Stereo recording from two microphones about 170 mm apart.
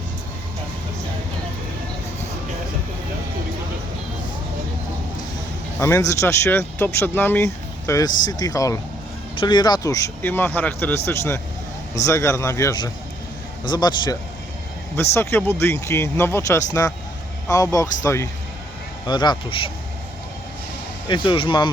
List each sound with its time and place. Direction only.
5.8 s speech: 15° left (ahead or behind)
21.1 s speech: 30° left (ahead or behind)